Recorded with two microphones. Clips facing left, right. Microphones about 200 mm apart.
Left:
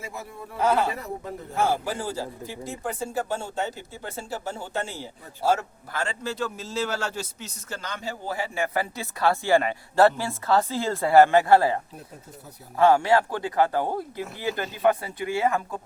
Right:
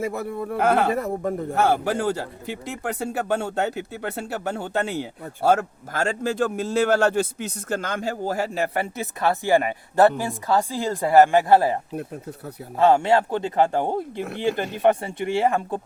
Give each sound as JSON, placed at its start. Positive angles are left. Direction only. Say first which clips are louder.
{"t": 0.0, "sound": "a man's voice", "louder": "right 11 dB", "side_deg": -60}
{"t": 9.0, "sound": "speech", "louder": "even", "side_deg": -20}
{"t": 14.2, "sound": "a man's voice", "louder": "right 5 dB", "side_deg": -65}
{"t": 14.8, "sound": "speech", "louder": "right 1 dB", "side_deg": -30}